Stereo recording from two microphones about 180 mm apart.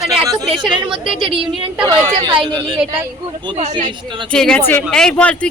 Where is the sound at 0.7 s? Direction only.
30° right (ahead or behind).